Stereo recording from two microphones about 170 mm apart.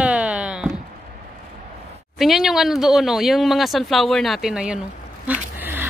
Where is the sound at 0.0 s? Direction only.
5° right (ahead or behind).